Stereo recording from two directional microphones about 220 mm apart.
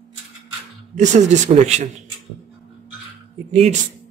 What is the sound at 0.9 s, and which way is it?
Speech, 35° right (ahead or behind).